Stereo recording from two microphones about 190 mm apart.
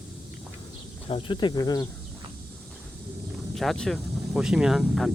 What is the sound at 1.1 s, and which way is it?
Speech, 25° left (ahead or behind).